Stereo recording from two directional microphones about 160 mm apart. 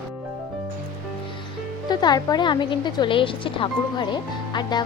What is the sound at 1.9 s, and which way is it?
A woman's voice, 25° left (ahead or behind).